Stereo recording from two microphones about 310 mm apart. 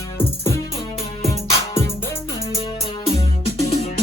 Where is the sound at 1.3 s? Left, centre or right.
Centre.